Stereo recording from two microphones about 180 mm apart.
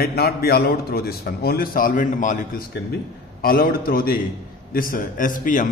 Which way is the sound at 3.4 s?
55° left (ahead or behind).